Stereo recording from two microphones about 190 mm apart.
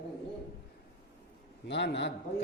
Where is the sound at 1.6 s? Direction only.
65° left (ahead or behind).